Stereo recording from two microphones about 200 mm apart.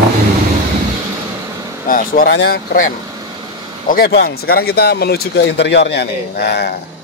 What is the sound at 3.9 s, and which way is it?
Speech, 50° left (ahead or behind).